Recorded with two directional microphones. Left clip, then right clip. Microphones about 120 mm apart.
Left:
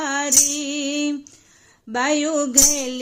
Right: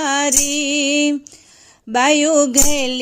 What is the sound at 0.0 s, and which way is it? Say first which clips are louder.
Music: right 3 dB; 40° right (ahead or behind).